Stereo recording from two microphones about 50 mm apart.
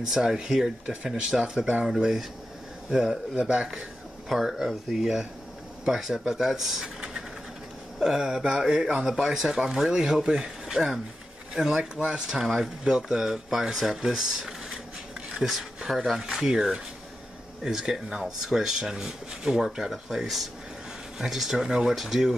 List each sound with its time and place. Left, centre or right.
0.1 s speech: centre
4.4 s speech: centre